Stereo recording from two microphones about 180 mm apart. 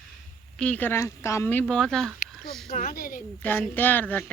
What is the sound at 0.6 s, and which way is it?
A woman's voice, 10° left (ahead or behind).